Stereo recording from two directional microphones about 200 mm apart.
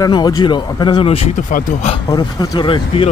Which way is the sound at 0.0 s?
20° left (ahead or behind).